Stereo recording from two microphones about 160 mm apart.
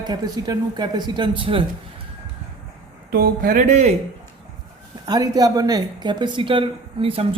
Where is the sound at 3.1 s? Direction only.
65° right (ahead or behind); by 3.9 s 45° right (ahead or behind).